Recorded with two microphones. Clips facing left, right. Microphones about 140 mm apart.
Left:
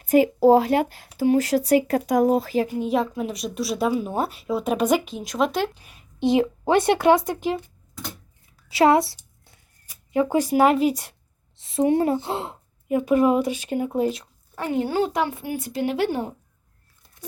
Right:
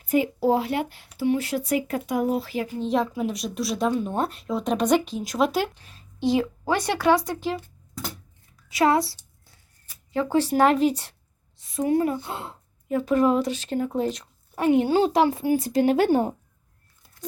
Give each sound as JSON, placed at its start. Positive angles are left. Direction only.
{"t": 0.0, "sound": "a sound", "side_deg": 90}
{"t": 0.3, "sound": "speech", "side_deg": 40}
{"t": 0.6, "sound": "speech", "side_deg": 90}
{"t": 1.0, "sound": "speech", "side_deg": 45}
{"t": 2.7, "sound": "a woman's voice", "side_deg": 5}
{"t": 5.7, "sound": "speech", "side_deg": 15}
{"t": 8.7, "sound": "a sound", "side_deg": 25}
{"t": 9.8, "sound": "speech", "side_deg": 15}
{"t": 11.5, "sound": "a woman's voice", "side_deg": 25}
{"t": 12.9, "sound": "speech", "side_deg": 10}
{"t": 14.5, "sound": "a woman's voice", "side_deg": -20}